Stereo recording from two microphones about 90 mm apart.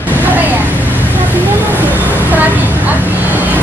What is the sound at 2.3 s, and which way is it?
Speech, 20° right (ahead or behind).